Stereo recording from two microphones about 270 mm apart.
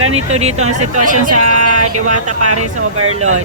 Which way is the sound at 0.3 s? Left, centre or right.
Right.